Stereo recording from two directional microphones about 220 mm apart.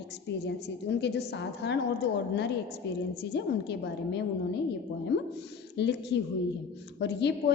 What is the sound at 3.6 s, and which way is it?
Speech, 50° left (ahead or behind).